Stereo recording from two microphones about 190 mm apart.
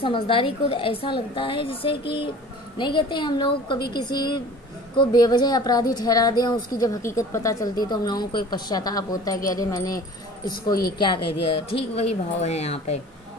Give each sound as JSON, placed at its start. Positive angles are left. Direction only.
{"t": 0.0, "sound": "a woman's voice", "side_deg": 30}
{"t": 10.7, "sound": "a woman's voice", "side_deg": 55}
{"t": 11.0, "sound": "a woman's voice", "side_deg": 25}